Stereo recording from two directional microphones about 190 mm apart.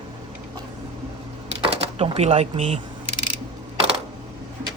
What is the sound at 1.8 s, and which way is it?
Speech, 35° right (ahead or behind).